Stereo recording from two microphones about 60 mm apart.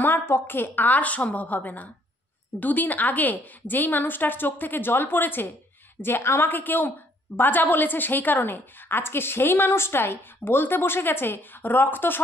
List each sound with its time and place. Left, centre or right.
0.0 s a woman's voice: left